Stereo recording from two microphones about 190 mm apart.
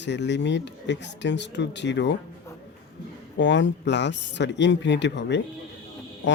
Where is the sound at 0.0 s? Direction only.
65° left (ahead or behind).